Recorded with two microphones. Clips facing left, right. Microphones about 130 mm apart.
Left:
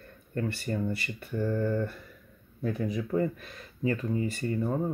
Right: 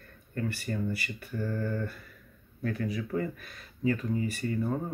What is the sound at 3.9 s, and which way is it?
Speech, centre (ahead or behind).